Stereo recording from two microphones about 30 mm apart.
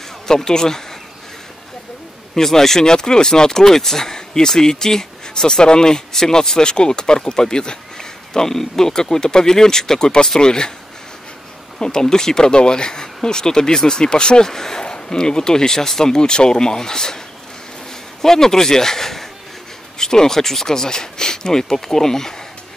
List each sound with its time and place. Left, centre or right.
0.3 s speech: left
2.3 s speech: centre
2.8 s speech: left
11.8 s speech: left
14.4 s speech: centre
18.2 s speech: centre